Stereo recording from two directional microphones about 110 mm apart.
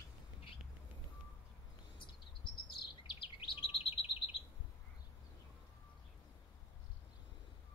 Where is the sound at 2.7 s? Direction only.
50° left (ahead or behind).